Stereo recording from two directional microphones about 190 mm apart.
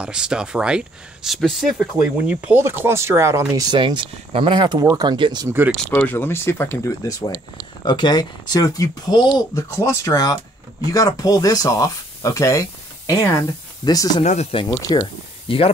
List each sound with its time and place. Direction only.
0.0 s speech: 5° right (ahead or behind)
5.8 s speech: 10° left (ahead or behind)
14.2 s speech: 35° left (ahead or behind)